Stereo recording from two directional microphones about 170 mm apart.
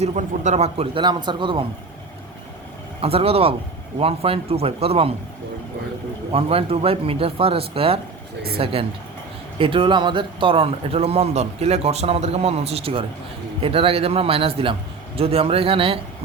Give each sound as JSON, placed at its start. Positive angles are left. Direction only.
{"t": 0.0, "sound": "speech", "side_deg": -45}
{"t": 3.0, "sound": "speech", "side_deg": -35}
{"t": 6.3, "sound": "speech", "side_deg": -35}